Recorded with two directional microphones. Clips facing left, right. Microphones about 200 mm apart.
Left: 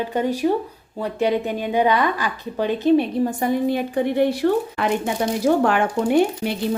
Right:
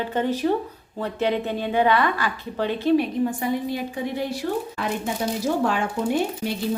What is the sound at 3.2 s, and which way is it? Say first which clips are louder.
A woman's voice: left 4 dB; 50° left (ahead or behind).